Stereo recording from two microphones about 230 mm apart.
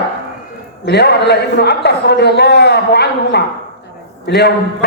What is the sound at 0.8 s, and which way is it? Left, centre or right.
A man's voice, left.